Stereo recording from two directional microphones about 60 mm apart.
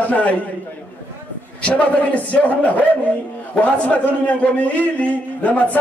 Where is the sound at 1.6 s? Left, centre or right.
Left.